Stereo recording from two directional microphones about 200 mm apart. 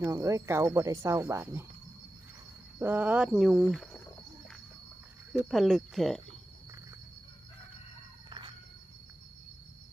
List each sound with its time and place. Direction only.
0.0 s speech: 15° right (ahead or behind)
2.7 s speech: 10° right (ahead or behind)
5.5 s speech: centre (ahead or behind)
8.3 s a sound: 25° right (ahead or behind)